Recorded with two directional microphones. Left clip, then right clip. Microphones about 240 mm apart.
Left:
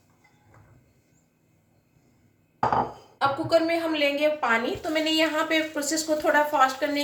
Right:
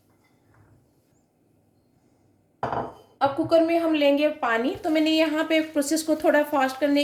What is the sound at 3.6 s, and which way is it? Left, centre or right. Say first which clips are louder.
A woman's voice: right 3 dB; right.